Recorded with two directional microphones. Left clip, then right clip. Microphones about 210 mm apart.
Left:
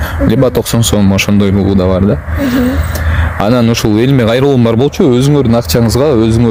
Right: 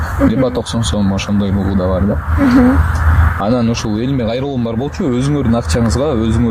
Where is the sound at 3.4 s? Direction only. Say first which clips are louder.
Left 7 dB; 55° left (ahead or behind).